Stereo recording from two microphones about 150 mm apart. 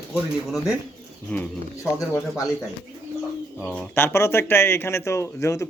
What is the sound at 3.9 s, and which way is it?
A man's voice, 15° left (ahead or behind).